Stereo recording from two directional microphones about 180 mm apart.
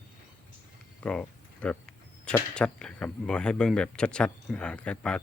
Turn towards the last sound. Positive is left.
turn(degrees=5)  # may be behind; listen again after turning